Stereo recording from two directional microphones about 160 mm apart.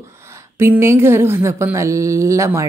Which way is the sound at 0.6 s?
15° right (ahead or behind).